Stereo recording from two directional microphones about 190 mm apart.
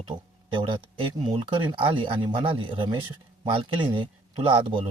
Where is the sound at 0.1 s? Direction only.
25° right (ahead or behind).